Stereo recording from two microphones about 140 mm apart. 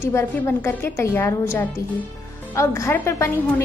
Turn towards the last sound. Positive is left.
turn(degrees=20)  # may be behind; listen again after turning